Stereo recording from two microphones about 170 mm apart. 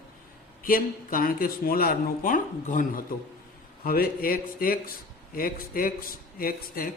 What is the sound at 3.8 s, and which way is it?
A man's voice, 60° left (ahead or behind).